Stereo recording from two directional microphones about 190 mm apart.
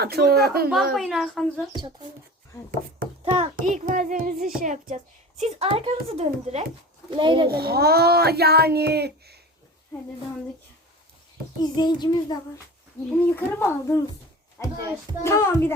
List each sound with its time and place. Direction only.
0.0 s a child's voice: 55° right (ahead or behind)
0.9 s speech: centre (ahead or behind)
3.2 s a sound: 30° right (ahead or behind)
3.5 s a child's voice: 40° right (ahead or behind)
5.4 s a child's voice: 30° right (ahead or behind)
7.4 s a child's voice: 55° right (ahead or behind)
11.6 s a child's voice: 20° left (ahead or behind)
13.1 s a child's voice: 10° left (ahead or behind)
15.2 s a child's voice: 15° left (ahead or behind)